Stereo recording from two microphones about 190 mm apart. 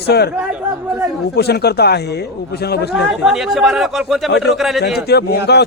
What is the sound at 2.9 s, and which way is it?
Speech, centre (ahead or behind).